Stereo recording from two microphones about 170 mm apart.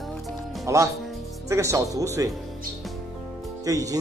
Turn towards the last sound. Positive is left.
turn(degrees=-20)  # may be behind; listen again after turning